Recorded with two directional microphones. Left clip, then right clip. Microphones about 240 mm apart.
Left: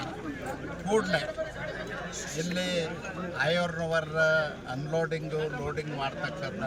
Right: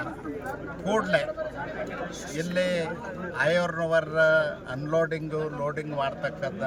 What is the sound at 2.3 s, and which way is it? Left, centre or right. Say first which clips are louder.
A man's voice: right 5 dB; centre.